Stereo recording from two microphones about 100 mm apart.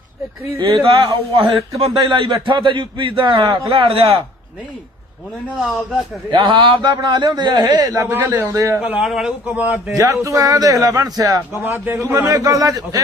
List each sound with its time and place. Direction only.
0.6 s a man's voice: 60° right (ahead or behind)
3.7 s speech: 65° right (ahead or behind)
6.3 s a man's voice: 55° right (ahead or behind); by 8.0 s 40° right (ahead or behind)
8.1 s a man's voice: 25° right (ahead or behind)
8.8 s speech: 10° right (ahead or behind)
9.0 s a man's voice: centre (ahead or behind)
9.5 s speech: 15° right (ahead or behind)
9.9 s a man's voice: 30° right (ahead or behind)
11.6 s a man's voice: 20° right (ahead or behind)
12.3 s a man's voice: 35° right (ahead or behind)